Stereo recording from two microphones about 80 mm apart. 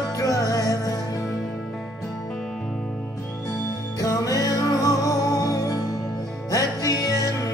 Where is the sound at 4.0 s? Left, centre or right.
Left.